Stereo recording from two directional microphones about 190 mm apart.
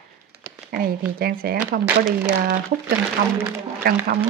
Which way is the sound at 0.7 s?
50° right (ahead or behind).